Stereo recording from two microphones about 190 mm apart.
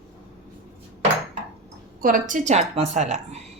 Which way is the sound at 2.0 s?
45° right (ahead or behind).